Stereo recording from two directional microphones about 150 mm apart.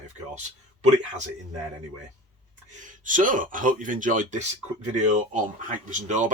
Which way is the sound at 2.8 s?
60° right (ahead or behind).